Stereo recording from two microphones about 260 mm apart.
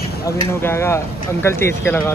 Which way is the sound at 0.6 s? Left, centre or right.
Centre.